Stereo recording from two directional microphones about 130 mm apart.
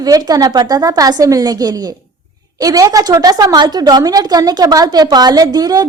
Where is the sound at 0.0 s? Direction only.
30° right (ahead or behind).